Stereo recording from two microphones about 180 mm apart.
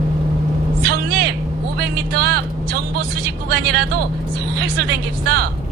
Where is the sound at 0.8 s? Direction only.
55° right (ahead or behind).